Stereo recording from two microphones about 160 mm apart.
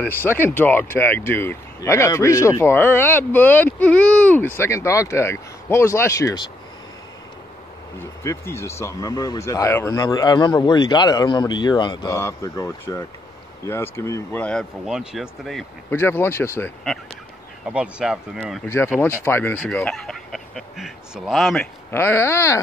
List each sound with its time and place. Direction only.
0.0 s speech: 10° left (ahead or behind)
8.0 s speech: 15° left (ahead or behind)
14.4 s speech: 5° left (ahead or behind)
15.9 s speech: 15° left (ahead or behind)
17.6 s speech: 5° right (ahead or behind)
19.2 s speech: 15° left (ahead or behind)
21.9 s speech: 15° left (ahead or behind)